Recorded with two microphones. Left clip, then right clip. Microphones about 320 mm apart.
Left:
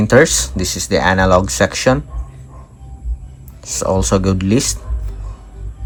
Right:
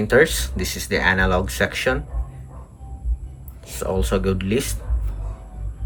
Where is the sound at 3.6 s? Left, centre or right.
Centre.